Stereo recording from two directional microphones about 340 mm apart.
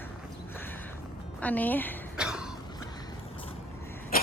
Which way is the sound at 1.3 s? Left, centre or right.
Centre.